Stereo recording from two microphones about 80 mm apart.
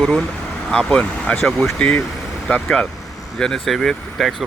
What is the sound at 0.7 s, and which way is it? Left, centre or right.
Speech, centre.